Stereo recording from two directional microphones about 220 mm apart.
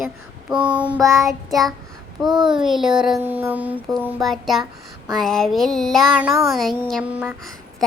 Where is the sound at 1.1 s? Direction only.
Centre (ahead or behind).